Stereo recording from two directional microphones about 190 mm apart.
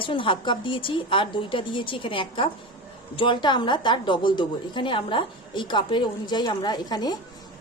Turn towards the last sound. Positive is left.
turn(degrees=20)  # may be behind; listen again after turning